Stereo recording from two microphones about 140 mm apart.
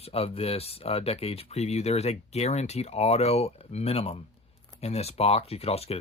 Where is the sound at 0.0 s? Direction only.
45° left (ahead or behind).